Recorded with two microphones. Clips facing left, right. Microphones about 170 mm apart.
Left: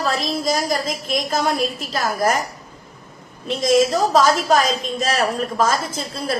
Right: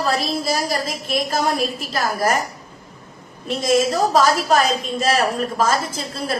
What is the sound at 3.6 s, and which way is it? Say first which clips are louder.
Speech: left 2 dB; 30° right (ahead or behind).